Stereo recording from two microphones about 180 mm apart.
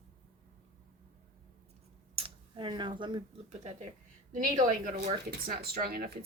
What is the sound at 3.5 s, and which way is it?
Speech, 40° right (ahead or behind).